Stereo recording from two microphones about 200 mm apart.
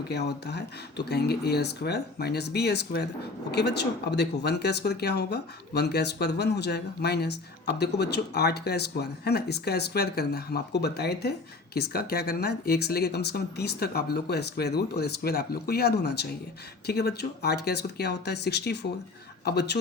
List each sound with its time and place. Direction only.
0.1 s speech: 55° left (ahead or behind)